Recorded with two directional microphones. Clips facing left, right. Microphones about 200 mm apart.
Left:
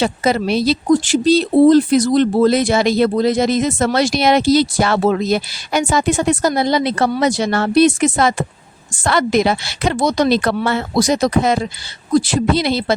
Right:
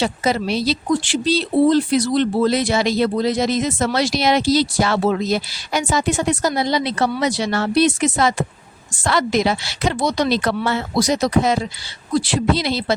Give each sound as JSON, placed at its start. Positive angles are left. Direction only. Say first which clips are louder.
{"t": 0.0, "sound": "speech", "louder": "left 3 dB", "side_deg": 55}
{"t": 12.1, "sound": "speech", "louder": "left 4 dB", "side_deg": 45}